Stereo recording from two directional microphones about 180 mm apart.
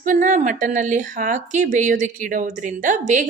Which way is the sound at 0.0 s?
45° right (ahead or behind).